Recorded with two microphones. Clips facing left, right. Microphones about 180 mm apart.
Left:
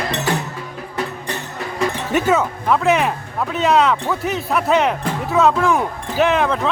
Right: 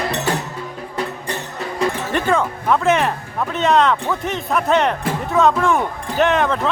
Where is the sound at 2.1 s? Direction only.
5° left (ahead or behind).